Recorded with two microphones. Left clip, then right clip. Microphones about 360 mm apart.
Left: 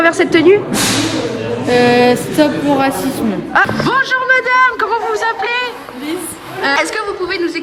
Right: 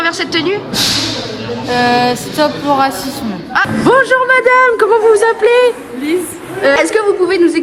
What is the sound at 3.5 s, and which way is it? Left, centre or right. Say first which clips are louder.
A man's voice: right 3 dB; centre.